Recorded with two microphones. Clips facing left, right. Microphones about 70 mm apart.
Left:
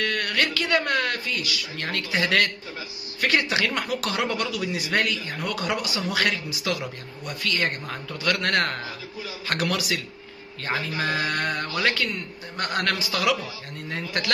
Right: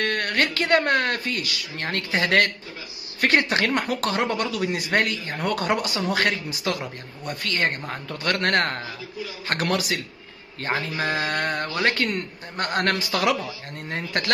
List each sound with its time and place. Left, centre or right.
0.0 s speech: right